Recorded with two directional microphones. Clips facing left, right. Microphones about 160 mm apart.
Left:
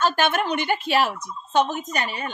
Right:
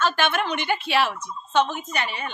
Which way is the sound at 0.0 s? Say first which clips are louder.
Left 2 dB; 40° left (ahead or behind).